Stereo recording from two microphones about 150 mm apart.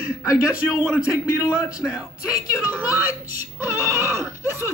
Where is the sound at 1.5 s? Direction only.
5° right (ahead or behind).